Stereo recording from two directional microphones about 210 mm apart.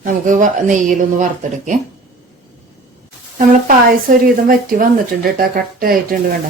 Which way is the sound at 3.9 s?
40° right (ahead or behind).